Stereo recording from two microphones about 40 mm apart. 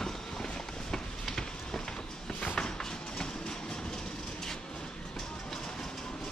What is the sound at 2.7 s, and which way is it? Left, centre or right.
Train, centre.